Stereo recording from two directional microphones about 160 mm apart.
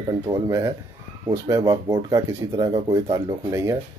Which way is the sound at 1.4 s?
20° right (ahead or behind).